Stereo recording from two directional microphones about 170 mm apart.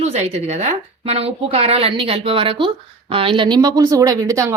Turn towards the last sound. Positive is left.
turn(degrees=-20)  # may be behind; listen again after turning